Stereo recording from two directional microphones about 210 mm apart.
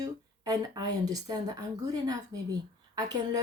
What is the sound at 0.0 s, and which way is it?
A woman's voice, 15° right (ahead or behind).